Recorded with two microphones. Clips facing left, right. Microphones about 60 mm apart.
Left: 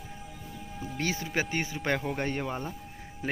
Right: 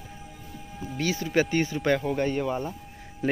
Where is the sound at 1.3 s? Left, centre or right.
Centre.